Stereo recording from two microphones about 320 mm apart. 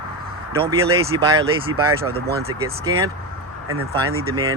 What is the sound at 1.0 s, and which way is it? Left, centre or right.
Speech, centre.